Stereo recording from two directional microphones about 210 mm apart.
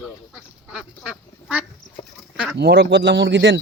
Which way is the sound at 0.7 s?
5° right (ahead or behind).